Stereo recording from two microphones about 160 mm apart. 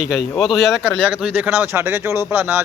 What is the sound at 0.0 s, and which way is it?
Speech, 5° right (ahead or behind).